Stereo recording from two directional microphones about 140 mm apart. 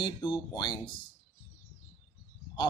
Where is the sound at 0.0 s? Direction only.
35° left (ahead or behind).